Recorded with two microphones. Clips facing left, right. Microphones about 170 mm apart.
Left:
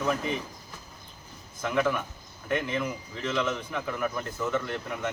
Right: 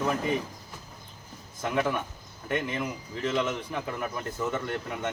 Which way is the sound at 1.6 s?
25° right (ahead or behind).